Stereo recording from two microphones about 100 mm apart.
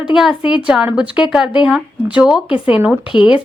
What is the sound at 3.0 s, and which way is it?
Speech, 55° left (ahead or behind).